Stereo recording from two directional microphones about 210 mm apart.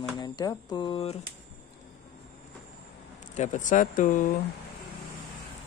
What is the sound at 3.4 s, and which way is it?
Speech, 35° left (ahead or behind).